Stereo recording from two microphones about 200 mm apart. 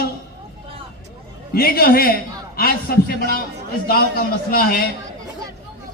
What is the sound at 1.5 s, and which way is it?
A man's voice, 50° left (ahead or behind).